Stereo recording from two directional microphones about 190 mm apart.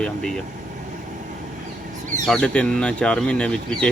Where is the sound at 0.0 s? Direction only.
5° left (ahead or behind).